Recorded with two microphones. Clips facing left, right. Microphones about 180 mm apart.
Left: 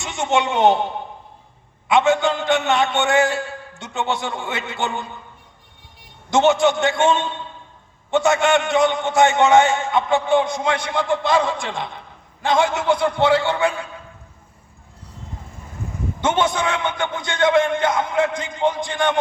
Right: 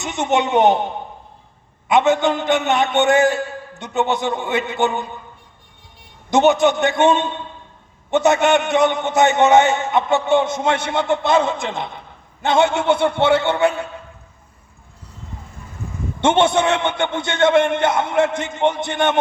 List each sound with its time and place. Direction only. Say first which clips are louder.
0.1 s a man's voice: right 2 dB; 20° right (ahead or behind)
1.9 s a man's voice: right 1 dB; 20° right (ahead or behind)
6.3 s a man's voice: right 2 dB; 20° right (ahead or behind)
16.2 s a man's voice: right 5 dB; 25° right (ahead or behind)